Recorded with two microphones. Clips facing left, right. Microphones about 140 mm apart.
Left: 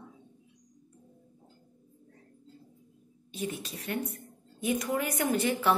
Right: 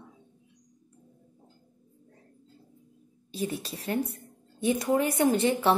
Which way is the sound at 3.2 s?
35° right (ahead or behind).